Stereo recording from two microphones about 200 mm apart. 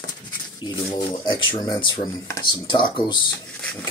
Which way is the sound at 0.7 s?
20° left (ahead or behind).